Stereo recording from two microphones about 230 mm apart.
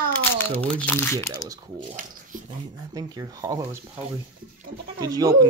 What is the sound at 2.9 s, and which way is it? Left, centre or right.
Speech, centre.